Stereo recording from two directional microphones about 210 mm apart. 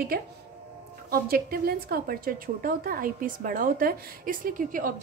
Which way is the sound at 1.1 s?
45° right (ahead or behind).